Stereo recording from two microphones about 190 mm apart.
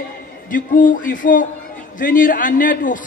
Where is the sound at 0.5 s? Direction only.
45° left (ahead or behind).